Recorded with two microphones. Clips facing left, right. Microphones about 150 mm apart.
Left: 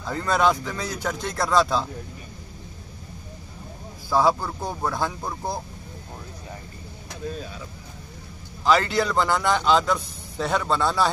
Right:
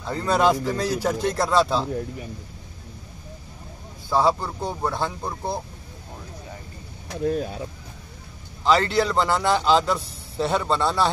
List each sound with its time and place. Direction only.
0.0 s a man's voice: 5° right (ahead or behind)
0.4 s speech: 35° right (ahead or behind)
4.1 s a man's voice: centre (ahead or behind)
7.2 s speech: 55° right (ahead or behind)
8.6 s a man's voice: centre (ahead or behind)